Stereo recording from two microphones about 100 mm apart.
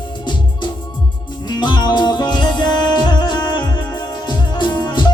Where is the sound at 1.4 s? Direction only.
45° left (ahead or behind).